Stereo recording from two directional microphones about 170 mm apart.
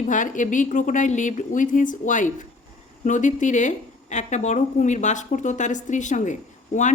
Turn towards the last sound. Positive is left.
turn(degrees=45)  # may be behind; listen again after turning